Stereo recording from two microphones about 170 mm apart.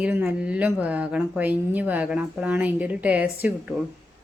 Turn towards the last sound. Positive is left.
turn(degrees=-5)  # may be behind; listen again after turning